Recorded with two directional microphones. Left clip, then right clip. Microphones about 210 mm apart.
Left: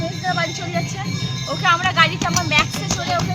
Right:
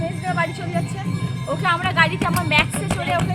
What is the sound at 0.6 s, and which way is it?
Speech, 45° right (ahead or behind).